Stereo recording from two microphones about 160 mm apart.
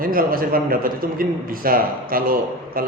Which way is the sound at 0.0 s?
65° right (ahead or behind).